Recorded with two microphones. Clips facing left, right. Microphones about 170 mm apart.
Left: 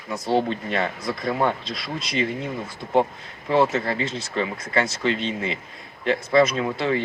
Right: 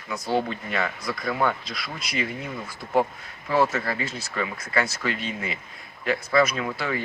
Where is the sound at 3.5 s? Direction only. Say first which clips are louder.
Left 3 dB; 20° left (ahead or behind).